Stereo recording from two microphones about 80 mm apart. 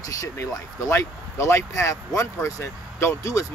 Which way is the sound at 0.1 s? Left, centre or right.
Left.